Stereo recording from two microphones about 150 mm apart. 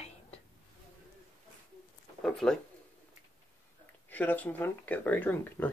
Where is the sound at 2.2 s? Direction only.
5° left (ahead or behind).